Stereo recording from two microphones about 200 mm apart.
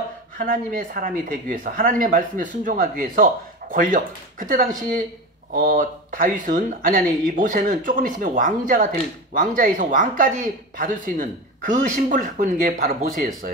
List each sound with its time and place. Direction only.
0.4 s speech: 40° right (ahead or behind)